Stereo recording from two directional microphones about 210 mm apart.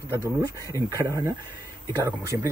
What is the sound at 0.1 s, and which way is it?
Speech, 15° right (ahead or behind).